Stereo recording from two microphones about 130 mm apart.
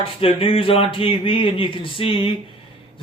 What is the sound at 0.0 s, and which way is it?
Speech, 45° left (ahead or behind).